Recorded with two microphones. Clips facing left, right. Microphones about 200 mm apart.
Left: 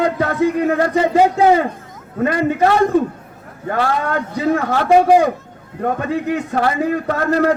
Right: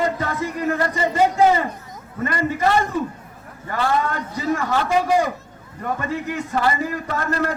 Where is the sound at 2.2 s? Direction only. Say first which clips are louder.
Left 6 dB; 65° left (ahead or behind).